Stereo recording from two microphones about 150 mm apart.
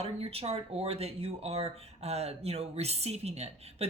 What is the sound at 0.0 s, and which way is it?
Speech, 40° right (ahead or behind).